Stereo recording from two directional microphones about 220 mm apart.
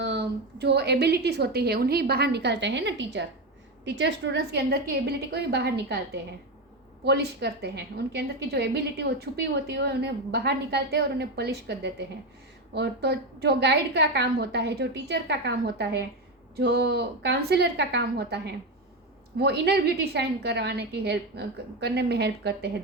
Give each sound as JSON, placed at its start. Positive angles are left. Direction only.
{"t": 0.0, "sound": "a woman's voice", "side_deg": -50}
{"t": 7.0, "sound": "a woman's voice", "side_deg": -50}